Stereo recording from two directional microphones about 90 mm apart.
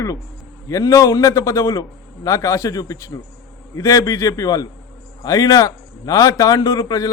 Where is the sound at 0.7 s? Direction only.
40° left (ahead or behind).